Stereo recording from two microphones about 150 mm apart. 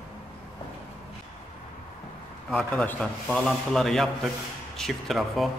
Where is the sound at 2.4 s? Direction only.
10° left (ahead or behind).